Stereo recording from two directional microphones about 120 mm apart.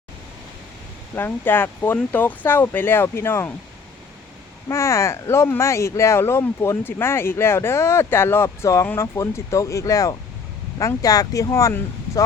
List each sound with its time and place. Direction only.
1.1 s speech: 20° left (ahead or behind)
4.7 s speech: 25° left (ahead or behind)